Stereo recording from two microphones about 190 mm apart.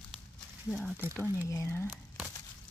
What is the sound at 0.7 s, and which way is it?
Speech, 5° right (ahead or behind).